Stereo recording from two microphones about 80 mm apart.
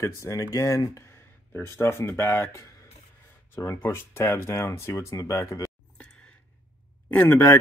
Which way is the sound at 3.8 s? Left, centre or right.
Left.